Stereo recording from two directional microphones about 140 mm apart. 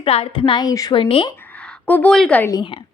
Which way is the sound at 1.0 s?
40° left (ahead or behind).